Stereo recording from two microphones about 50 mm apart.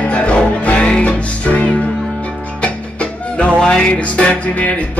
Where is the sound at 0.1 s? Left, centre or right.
Left.